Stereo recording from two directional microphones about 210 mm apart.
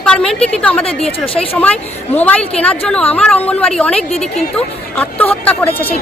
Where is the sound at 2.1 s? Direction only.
5° left (ahead or behind).